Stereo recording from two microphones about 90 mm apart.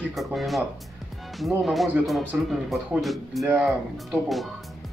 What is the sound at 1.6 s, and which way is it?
Speech, centre (ahead or behind).